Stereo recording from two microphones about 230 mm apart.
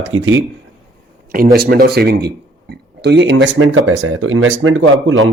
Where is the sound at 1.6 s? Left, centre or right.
Right.